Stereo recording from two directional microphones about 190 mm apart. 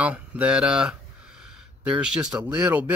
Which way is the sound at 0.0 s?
5° right (ahead or behind).